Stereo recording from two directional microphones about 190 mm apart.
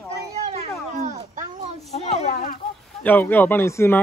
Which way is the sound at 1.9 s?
35° left (ahead or behind).